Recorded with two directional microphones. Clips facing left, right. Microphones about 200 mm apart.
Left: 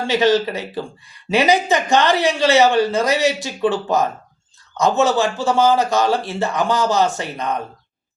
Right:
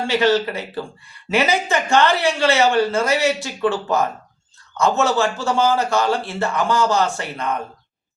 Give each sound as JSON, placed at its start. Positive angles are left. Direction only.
{"t": 0.1, "sound": "speech", "side_deg": 15}
{"t": 4.8, "sound": "speech", "side_deg": 15}